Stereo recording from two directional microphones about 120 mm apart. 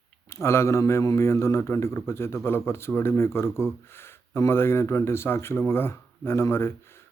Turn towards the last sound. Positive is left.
turn(degrees=20)  # may be behind; listen again after turning